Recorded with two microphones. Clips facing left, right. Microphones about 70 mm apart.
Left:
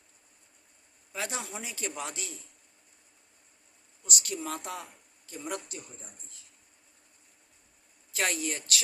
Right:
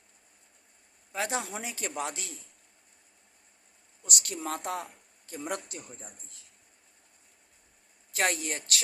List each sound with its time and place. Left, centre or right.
1.1 s speech: right
4.0 s a man's voice: right
5.7 s speech: right
8.1 s speech: right